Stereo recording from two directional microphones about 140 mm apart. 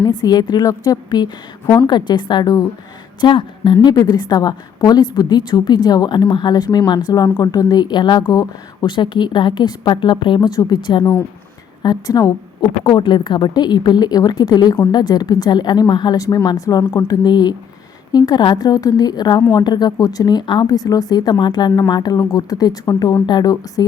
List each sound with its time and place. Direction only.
0.0 s a woman's voice: 30° left (ahead or behind)
1.6 s a woman's voice: 20° left (ahead or behind)
1.9 s a woman's voice: 30° left (ahead or behind)